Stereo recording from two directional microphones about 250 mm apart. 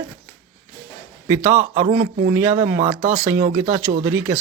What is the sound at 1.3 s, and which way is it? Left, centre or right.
Speech, centre.